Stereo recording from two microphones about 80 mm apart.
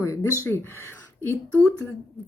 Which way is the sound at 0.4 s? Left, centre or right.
Left.